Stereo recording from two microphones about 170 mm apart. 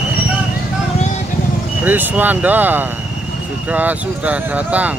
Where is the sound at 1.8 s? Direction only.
10° right (ahead or behind).